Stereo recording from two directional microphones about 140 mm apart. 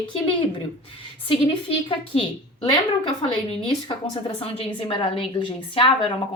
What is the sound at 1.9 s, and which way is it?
Speech, 40° left (ahead or behind).